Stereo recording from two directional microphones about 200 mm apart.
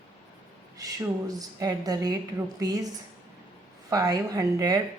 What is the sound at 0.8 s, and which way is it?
A woman's voice, 15° right (ahead or behind).